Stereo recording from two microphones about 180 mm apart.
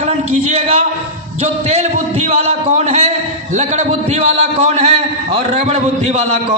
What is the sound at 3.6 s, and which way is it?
A man's voice, 40° right (ahead or behind).